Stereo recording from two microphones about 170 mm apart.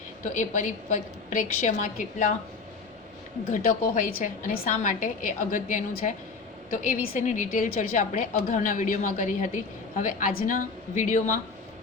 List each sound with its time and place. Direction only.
0.3 s a woman's voice: 45° left (ahead or behind)
3.5 s a woman's voice: 50° left (ahead or behind)